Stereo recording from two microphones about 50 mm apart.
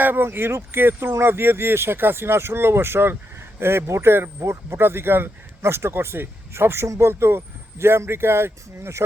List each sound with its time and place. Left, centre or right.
0.0 s speech: right
7.1 s speech: right